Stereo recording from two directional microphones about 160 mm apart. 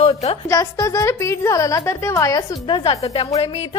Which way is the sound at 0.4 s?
20° left (ahead or behind).